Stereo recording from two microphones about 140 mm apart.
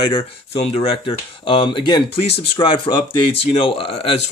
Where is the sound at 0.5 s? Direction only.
45° left (ahead or behind).